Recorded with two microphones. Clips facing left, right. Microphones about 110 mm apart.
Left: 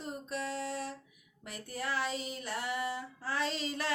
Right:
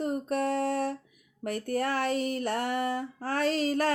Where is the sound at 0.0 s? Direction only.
55° right (ahead or behind).